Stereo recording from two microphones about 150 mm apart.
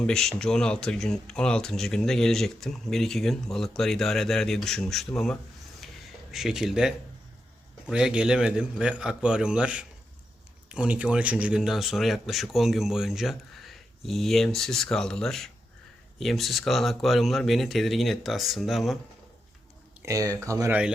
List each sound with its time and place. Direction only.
0.0 s speech: 5° left (ahead or behind)
5.8 s a sound: centre (ahead or behind)
6.3 s speech: centre (ahead or behind)
20.0 s speech: 20° right (ahead or behind)